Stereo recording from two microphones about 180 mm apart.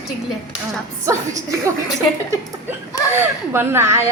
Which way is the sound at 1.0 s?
15° right (ahead or behind).